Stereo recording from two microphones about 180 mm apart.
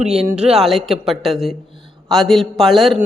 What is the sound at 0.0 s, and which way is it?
Speech, 5° right (ahead or behind).